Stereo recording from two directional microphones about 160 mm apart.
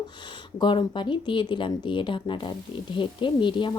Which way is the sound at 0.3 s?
30° left (ahead or behind).